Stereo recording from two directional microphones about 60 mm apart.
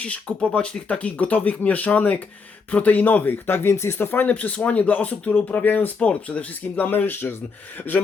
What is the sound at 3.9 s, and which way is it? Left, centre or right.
Speech, left.